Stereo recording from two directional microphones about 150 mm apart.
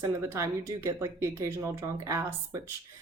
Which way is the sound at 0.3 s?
20° right (ahead or behind).